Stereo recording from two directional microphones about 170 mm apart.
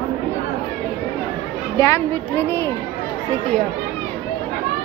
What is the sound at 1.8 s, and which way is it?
Speech, 15° left (ahead or behind).